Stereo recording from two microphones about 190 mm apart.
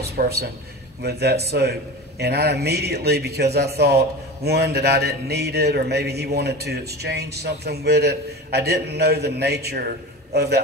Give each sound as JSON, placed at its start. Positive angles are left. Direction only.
{"t": 0.0, "sound": "a man's voice", "side_deg": -55}